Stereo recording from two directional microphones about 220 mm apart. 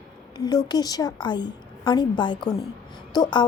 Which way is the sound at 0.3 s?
15° left (ahead or behind).